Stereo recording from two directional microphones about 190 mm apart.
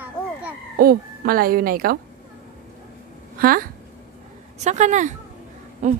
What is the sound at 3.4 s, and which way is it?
Speech, 50° right (ahead or behind).